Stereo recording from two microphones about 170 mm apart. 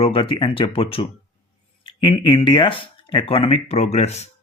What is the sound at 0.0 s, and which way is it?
Speech, 30° left (ahead or behind).